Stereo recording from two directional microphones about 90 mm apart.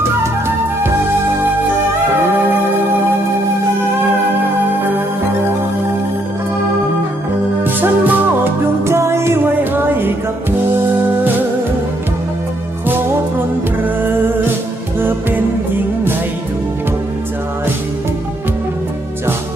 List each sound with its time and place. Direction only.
7.6 s music: 20° right (ahead or behind)
15.0 s music: 25° right (ahead or behind)